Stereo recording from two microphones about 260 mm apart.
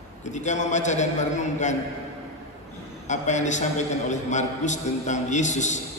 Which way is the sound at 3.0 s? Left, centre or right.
Left.